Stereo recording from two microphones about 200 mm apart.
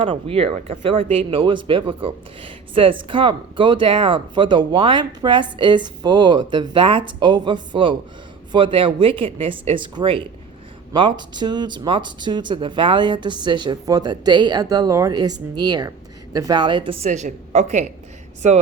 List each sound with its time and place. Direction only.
0.0 s a woman's voice: 30° right (ahead or behind)